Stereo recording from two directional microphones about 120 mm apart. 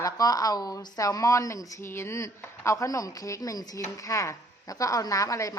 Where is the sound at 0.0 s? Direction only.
30° left (ahead or behind).